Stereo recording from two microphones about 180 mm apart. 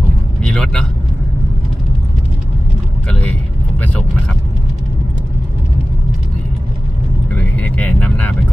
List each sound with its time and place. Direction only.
0.4 s vehicle: 5° left (ahead or behind)
3.1 s vehicle: 10° left (ahead or behind)
7.3 s vehicle: 10° left (ahead or behind)